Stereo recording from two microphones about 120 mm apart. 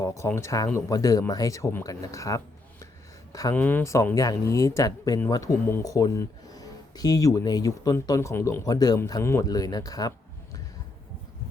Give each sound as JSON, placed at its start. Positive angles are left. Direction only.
{"t": 0.0, "sound": "speech", "side_deg": 25}
{"t": 3.5, "sound": "speech", "side_deg": 15}